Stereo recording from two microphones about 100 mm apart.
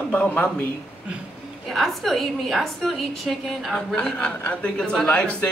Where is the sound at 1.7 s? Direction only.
Centre (ahead or behind).